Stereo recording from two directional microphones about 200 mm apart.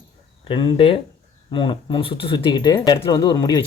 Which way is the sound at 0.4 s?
25° left (ahead or behind).